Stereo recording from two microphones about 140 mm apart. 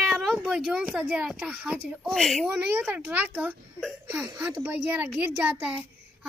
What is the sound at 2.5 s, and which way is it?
A child's voice, 10° right (ahead or behind).